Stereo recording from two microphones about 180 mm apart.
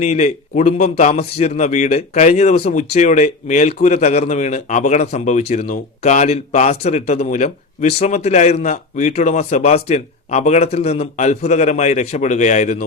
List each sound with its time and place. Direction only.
0.0 s speech: 40° left (ahead or behind)